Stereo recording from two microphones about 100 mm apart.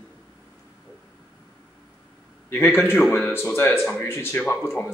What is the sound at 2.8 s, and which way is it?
Speech, 20° left (ahead or behind).